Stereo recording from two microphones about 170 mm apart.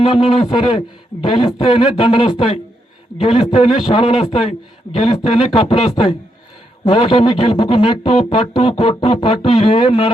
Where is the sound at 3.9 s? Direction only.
35° left (ahead or behind).